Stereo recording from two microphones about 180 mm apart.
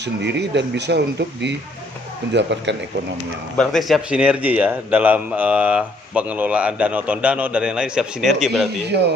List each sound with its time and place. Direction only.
0.0 s a man's voice: 75° right (ahead or behind)
3.6 s a man's voice: centre (ahead or behind)
8.9 s speech: 70° right (ahead or behind)